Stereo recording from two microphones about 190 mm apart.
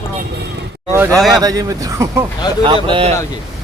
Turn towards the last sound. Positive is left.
turn(degrees=-30)  # may be behind; listen again after turning